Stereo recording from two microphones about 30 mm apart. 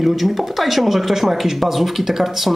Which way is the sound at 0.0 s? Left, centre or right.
Centre.